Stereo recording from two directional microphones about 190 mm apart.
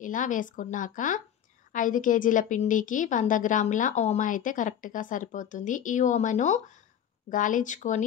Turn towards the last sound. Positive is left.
turn(degrees=40)  # may be behind; listen again after turning